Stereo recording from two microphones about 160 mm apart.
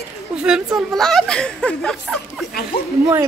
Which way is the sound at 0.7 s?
Centre (ahead or behind).